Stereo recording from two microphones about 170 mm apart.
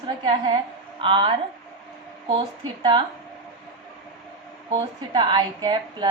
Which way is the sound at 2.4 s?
30° right (ahead or behind).